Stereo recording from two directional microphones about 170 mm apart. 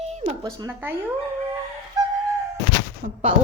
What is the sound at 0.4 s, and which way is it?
Speech, 15° right (ahead or behind).